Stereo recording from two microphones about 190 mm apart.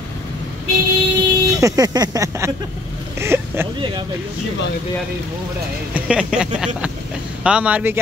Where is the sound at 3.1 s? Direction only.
15° right (ahead or behind).